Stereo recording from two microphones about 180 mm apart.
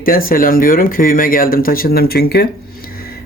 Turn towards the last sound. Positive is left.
turn(degrees=55)  # may be behind; listen again after turning